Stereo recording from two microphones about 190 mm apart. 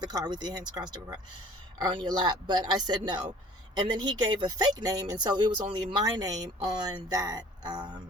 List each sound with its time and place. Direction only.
0.0 s speech: 20° right (ahead or behind)